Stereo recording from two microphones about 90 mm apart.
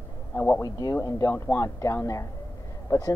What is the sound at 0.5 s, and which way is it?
Speech, 40° left (ahead or behind).